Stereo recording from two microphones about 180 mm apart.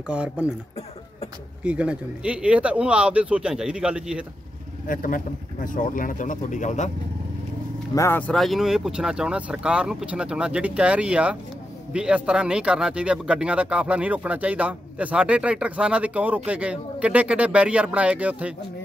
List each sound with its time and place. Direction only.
0.1 s speech: 5° right (ahead or behind)
1.6 s speech: 5° right (ahead or behind)
4.8 s speech: 50° left (ahead or behind)
7.9 s speech: 15° left (ahead or behind); by 18.5 s 5° right (ahead or behind)